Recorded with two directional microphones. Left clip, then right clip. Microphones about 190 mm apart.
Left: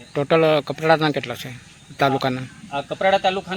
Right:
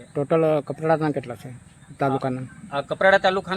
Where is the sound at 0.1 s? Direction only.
5° left (ahead or behind).